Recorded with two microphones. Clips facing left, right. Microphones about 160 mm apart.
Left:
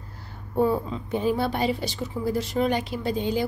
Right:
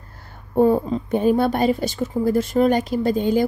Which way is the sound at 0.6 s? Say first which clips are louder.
Right 6 dB; 45° right (ahead or behind).